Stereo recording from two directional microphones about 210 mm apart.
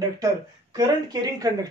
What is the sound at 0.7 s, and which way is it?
Speech, 15° right (ahead or behind).